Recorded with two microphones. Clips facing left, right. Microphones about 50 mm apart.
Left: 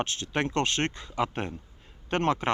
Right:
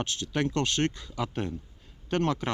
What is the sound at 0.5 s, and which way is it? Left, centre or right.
Speech, centre.